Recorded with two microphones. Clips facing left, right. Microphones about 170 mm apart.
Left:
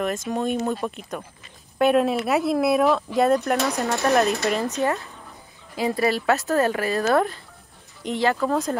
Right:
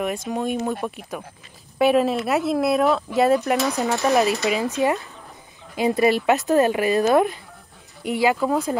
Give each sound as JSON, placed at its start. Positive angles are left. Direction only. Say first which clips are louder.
{"t": 0.0, "sound": "speech", "louder": "even", "side_deg": -10}